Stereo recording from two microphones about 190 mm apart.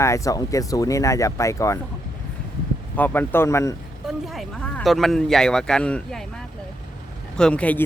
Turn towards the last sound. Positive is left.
turn(degrees=5)  # may be behind; listen again after turning